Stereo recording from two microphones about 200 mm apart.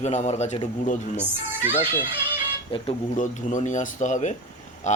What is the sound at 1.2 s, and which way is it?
Speech, 10° right (ahead or behind).